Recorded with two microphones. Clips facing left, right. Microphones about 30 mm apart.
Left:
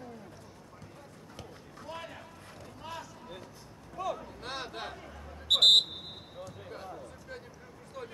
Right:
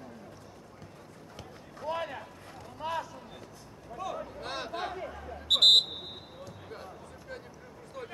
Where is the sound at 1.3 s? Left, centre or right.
Centre.